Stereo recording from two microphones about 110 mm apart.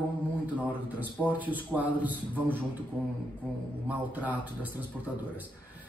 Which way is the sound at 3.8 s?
15° right (ahead or behind).